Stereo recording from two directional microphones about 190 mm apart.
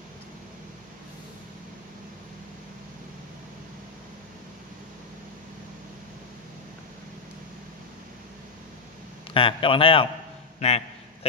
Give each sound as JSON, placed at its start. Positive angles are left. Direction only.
{"t": 9.3, "sound": "a man's voice", "side_deg": 30}